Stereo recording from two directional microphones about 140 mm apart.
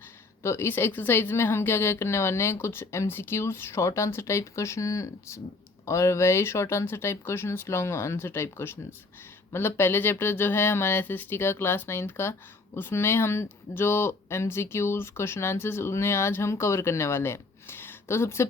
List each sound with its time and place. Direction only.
0.4 s a woman's voice: 20° left (ahead or behind)